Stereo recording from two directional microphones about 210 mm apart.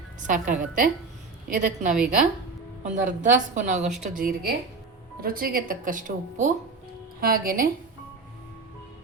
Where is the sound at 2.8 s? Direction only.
35° right (ahead or behind).